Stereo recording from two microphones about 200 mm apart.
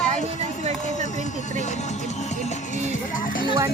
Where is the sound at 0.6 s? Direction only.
35° right (ahead or behind).